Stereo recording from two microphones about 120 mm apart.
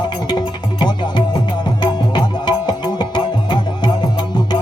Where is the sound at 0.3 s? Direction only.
40° left (ahead or behind).